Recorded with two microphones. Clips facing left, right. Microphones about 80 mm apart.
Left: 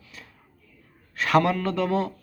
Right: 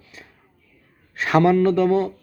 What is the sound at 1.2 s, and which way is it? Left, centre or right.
Speech, centre.